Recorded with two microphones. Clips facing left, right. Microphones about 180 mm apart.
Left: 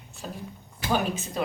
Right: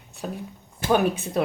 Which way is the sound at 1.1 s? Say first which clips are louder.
Right 4 dB; 60° right (ahead or behind).